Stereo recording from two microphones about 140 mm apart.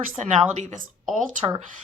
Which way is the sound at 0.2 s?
55° right (ahead or behind).